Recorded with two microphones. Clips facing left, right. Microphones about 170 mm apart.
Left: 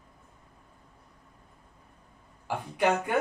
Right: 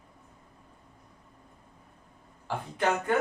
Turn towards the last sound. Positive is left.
turn(degrees=10)  # may be behind; listen again after turning